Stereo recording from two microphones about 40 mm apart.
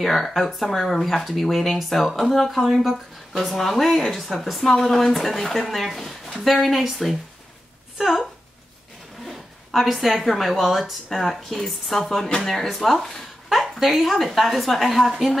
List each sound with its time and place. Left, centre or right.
0.0 s speech: centre